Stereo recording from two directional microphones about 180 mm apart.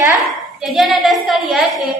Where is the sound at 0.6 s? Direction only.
Centre (ahead or behind).